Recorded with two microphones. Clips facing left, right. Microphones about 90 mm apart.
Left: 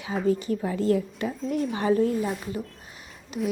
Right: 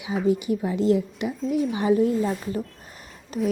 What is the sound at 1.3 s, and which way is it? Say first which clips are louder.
Speech: right 4 dB; centre (ahead or behind).